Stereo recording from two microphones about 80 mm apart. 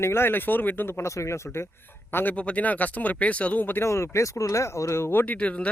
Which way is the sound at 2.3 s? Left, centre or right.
Centre.